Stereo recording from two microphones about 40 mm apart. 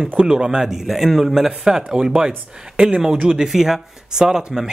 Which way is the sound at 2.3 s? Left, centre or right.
Right.